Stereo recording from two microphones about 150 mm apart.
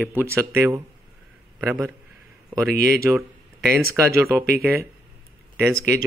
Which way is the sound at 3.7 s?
15° right (ahead or behind).